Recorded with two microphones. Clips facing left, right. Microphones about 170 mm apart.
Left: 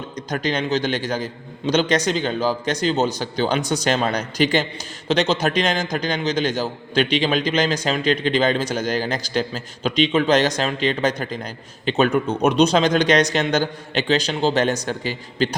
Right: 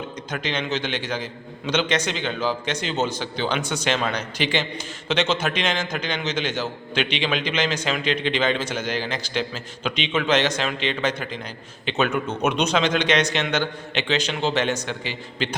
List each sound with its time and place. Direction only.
0.3 s a man's voice: 40° left (ahead or behind)